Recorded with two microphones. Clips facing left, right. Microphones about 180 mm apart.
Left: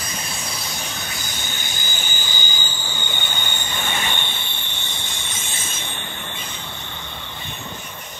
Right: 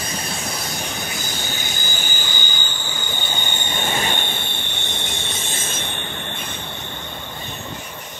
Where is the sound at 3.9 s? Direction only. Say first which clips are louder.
Right 3 dB; 45° right (ahead or behind).